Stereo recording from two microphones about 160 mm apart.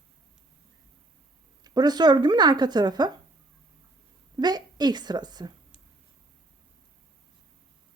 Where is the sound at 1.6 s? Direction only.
25° right (ahead or behind).